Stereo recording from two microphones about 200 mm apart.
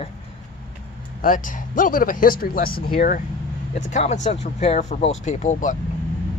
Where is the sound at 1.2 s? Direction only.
40° left (ahead or behind).